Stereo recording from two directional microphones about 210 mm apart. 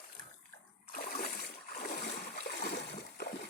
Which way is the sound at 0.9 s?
45° left (ahead or behind).